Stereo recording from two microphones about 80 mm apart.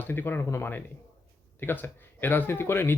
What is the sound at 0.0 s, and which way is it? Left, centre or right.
A man's voice, left.